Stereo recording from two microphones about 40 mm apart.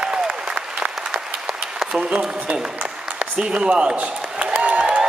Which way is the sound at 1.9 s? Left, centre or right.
Right.